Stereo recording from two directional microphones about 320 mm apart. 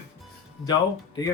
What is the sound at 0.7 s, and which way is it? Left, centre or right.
Speech, centre.